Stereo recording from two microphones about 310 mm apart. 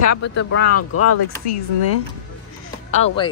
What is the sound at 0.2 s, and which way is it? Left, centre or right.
Speech, left.